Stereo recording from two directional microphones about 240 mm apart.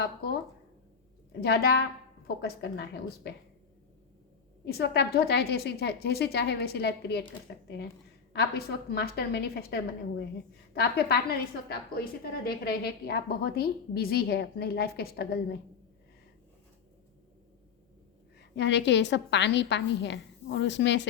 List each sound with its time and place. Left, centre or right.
0.0 s a woman's voice: left
4.6 s a woman's voice: left
18.3 s a woman's voice: left